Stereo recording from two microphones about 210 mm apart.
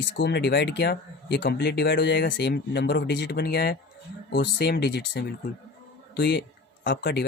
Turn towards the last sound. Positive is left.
turn(degrees=50)  # may be behind; listen again after turning